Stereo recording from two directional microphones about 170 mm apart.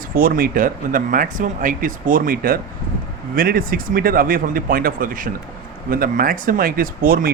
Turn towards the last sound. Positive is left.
turn(degrees=-60)  # may be behind; listen again after turning